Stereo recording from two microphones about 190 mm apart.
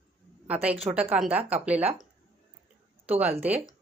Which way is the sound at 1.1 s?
5° right (ahead or behind).